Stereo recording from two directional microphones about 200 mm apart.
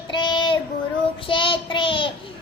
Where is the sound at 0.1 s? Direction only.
25° left (ahead or behind).